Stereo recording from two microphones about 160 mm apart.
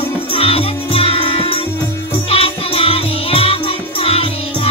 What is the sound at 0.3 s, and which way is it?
Music, 35° left (ahead or behind).